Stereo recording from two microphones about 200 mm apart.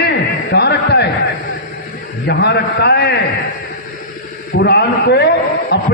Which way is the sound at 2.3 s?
55° left (ahead or behind).